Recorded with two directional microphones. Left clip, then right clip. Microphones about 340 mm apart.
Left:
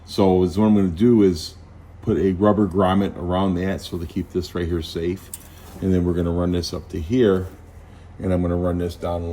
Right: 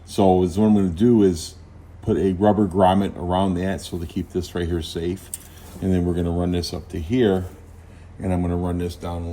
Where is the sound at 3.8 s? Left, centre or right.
Centre.